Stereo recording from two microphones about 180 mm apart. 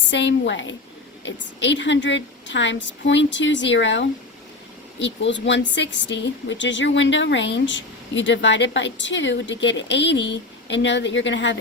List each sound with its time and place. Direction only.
0.1 s a woman's voice: 85° left